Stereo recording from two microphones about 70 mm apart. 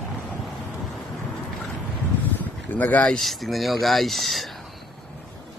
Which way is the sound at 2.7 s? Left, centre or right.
Left.